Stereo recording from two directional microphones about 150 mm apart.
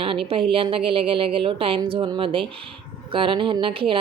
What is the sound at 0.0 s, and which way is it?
A woman's voice, 35° right (ahead or behind).